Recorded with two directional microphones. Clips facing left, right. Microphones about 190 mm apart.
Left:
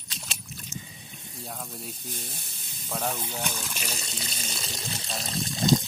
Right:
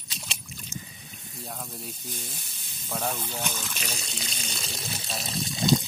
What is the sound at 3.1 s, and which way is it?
Speech, 5° left (ahead or behind).